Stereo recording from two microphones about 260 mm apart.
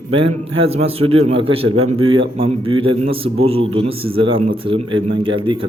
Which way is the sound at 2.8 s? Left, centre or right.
Right.